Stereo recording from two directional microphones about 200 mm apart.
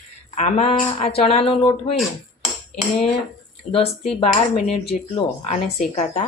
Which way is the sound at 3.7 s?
30° left (ahead or behind).